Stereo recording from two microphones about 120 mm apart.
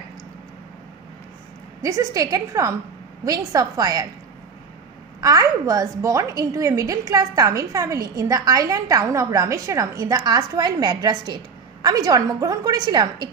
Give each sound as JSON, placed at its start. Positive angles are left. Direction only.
{"t": 1.8, "sound": "a woman's voice", "side_deg": -25}
{"t": 5.2, "sound": "a woman's voice", "side_deg": -30}